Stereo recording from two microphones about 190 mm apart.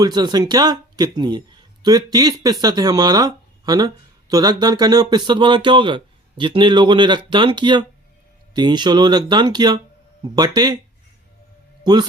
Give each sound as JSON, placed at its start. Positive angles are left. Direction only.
{"t": 0.0, "sound": "speech", "side_deg": -20}
{"t": 11.9, "sound": "speech", "side_deg": -20}